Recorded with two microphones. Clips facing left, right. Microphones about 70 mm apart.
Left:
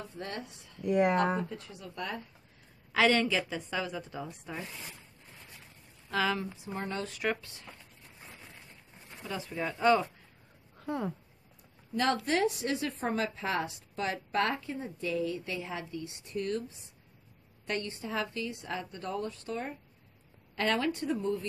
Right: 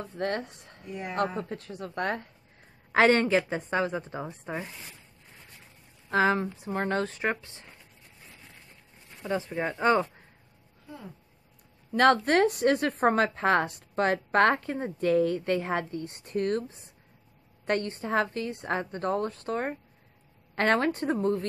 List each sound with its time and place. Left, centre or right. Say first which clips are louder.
0.0 s a woman's voice: right 9 dB; right
0.8 s speech: left 11 dB; left
1.5 s a woman's voice: right 7 dB; right
6.0 s a woman's voice: right 6 dB; right
6.6 s a woman's voice: right 8 dB; right
7.1 s speech: right 3 dB; right
9.2 s a woman's voice: right 6 dB; right
11.9 s a woman's voice: right 8 dB; right
17.6 s a woman's voice: right 7 dB; right